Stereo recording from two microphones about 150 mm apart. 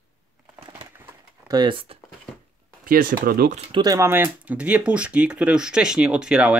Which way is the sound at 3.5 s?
35° right (ahead or behind).